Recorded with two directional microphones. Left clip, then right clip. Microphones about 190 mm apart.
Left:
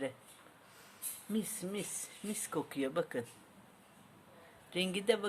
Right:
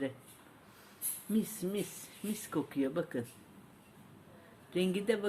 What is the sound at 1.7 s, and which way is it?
Speech, 35° left (ahead or behind).